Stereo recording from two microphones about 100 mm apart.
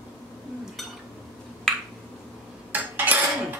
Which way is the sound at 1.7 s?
5° left (ahead or behind).